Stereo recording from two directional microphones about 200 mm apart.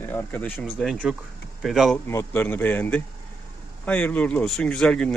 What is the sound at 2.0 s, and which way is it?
Speech, 10° left (ahead or behind).